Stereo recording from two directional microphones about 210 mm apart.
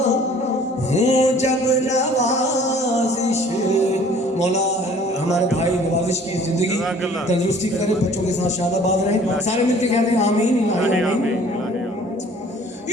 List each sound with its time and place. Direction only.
0.9 s a sound: 30° left (ahead or behind)
3.2 s music: 30° left (ahead or behind)
9.5 s speech: 30° left (ahead or behind)